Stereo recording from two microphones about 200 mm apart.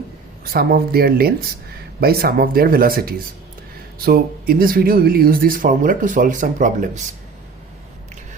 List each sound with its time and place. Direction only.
0.5 s speech: 50° right (ahead or behind)